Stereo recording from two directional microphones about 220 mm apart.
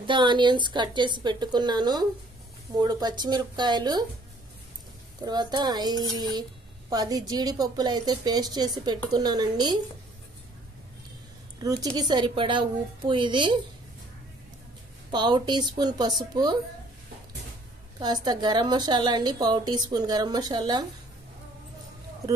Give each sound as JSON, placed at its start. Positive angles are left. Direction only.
{"t": 0.0, "sound": "a woman's voice", "side_deg": -20}
{"t": 5.2, "sound": "a woman's voice", "side_deg": -20}
{"t": 11.6, "sound": "a woman's voice", "side_deg": -15}
{"t": 15.0, "sound": "a woman's voice", "side_deg": -20}
{"t": 17.9, "sound": "a woman's voice", "side_deg": -20}